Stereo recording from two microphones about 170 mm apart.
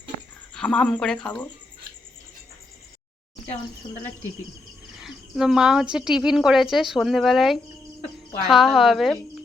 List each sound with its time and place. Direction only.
0.5 s a woman's voice: 5° left (ahead or behind)
3.8 s speech: 30° left (ahead or behind)
4.9 s a woman's voice: centre (ahead or behind)